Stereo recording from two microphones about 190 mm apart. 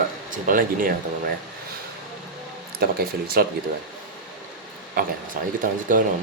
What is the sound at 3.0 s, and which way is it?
Speech, 50° right (ahead or behind).